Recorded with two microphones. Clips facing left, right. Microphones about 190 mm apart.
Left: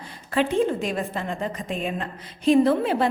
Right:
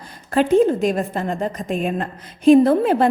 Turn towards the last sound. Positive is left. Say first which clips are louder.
# right 5 dB
turn(degrees=-50)  # may be behind; listen again after turning